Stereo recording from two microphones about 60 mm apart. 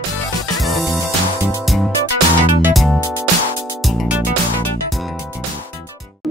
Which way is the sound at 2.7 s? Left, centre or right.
Centre.